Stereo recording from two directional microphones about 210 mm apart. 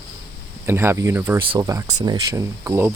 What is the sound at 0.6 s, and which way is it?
Speech, 10° right (ahead or behind).